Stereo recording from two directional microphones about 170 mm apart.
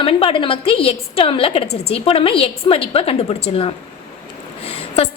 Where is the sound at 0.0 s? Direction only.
30° left (ahead or behind).